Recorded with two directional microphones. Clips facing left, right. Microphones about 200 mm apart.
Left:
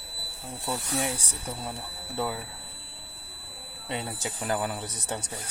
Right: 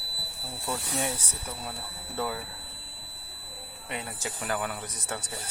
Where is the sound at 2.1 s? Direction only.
10° left (ahead or behind).